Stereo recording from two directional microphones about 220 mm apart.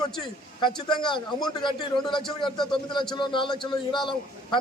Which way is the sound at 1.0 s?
20° left (ahead or behind).